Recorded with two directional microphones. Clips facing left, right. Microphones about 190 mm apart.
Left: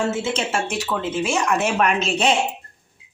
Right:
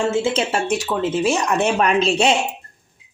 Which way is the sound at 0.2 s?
30° right (ahead or behind).